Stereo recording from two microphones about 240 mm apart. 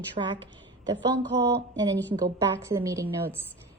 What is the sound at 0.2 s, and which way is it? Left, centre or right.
Speech, right.